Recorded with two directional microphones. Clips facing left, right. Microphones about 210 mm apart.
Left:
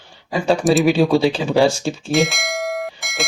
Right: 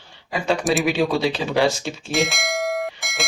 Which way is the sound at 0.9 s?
30° left (ahead or behind).